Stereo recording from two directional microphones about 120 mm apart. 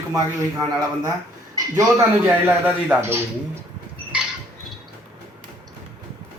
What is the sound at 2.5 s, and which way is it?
Speech, 15° right (ahead or behind).